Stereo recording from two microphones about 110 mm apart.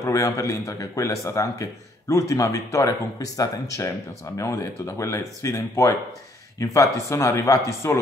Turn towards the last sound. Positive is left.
turn(degrees=30)  # may be behind; listen again after turning